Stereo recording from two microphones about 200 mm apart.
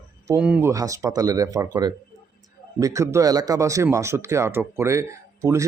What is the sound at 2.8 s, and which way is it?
Speech, 15° right (ahead or behind).